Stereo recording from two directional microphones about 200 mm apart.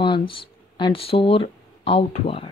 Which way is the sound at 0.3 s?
25° left (ahead or behind).